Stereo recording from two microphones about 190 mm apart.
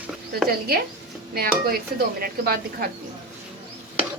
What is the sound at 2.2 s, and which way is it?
Speech, 55° right (ahead or behind).